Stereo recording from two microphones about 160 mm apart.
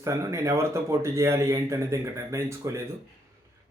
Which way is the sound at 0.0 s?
20° right (ahead or behind).